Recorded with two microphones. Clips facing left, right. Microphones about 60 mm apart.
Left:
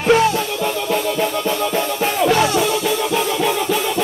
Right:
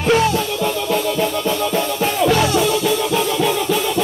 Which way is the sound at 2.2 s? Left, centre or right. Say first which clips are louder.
Even; left.